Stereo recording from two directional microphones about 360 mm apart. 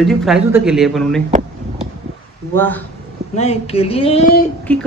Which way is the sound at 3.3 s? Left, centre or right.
Centre.